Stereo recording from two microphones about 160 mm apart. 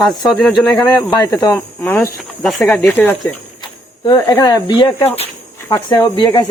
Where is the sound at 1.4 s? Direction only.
15° left (ahead or behind).